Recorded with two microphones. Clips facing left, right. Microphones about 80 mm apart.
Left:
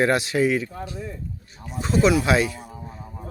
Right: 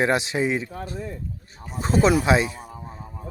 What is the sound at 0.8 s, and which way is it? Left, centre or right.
Speech, right.